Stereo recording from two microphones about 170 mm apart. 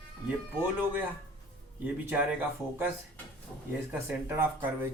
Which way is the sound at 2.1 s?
10° right (ahead or behind).